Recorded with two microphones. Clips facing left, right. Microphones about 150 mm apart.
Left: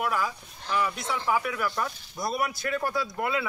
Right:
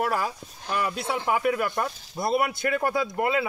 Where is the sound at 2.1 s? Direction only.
25° right (ahead or behind).